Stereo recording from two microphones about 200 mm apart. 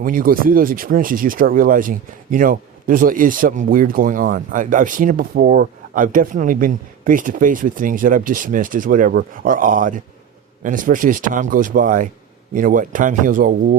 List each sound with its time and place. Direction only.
0.0 s a man's voice: 45° right (ahead or behind)